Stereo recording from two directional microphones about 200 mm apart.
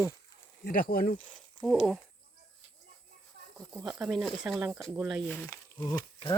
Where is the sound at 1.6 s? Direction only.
Centre (ahead or behind).